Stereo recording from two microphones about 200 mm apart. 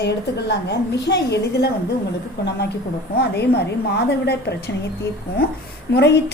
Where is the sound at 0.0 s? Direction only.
60° left (ahead or behind).